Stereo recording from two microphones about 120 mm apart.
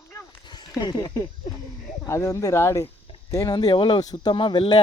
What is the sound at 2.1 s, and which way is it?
Speech, 25° left (ahead or behind).